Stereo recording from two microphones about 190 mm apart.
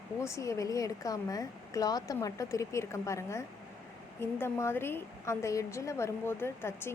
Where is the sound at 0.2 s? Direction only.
15° left (ahead or behind).